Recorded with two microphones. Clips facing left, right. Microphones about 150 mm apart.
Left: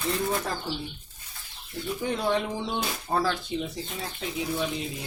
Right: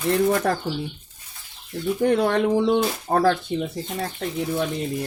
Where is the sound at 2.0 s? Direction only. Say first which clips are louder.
Right 7 dB; 65° right (ahead or behind).